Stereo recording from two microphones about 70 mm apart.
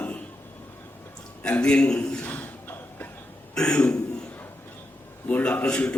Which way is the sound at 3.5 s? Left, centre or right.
Centre.